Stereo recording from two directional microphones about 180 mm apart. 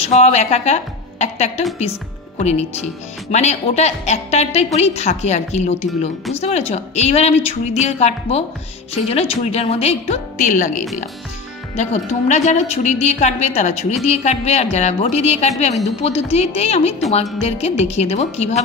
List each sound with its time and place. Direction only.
0.0 s a woman's voice: 35° left (ahead or behind)
2.3 s a woman's voice: 35° left (ahead or behind)